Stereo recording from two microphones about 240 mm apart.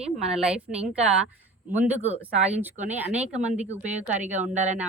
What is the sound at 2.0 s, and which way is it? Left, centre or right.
Speech, right.